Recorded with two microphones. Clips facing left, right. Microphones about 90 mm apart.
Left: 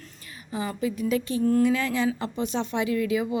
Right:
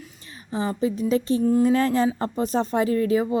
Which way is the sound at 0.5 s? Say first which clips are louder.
Right 4 dB; 30° right (ahead or behind).